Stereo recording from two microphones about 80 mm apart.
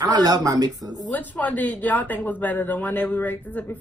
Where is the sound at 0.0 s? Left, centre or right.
Right.